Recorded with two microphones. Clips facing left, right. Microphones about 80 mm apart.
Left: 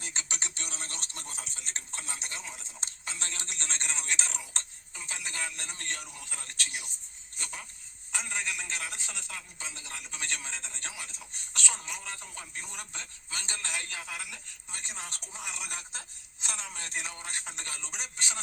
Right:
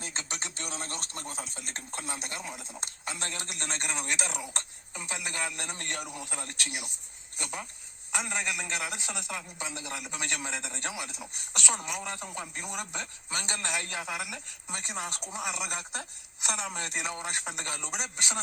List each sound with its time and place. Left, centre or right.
0.0 s a sound: right
2.5 s a woman's voice: right
10.1 s a woman's voice: right